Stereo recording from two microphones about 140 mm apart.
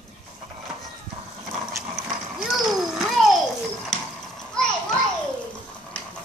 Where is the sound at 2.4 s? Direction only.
Centre (ahead or behind).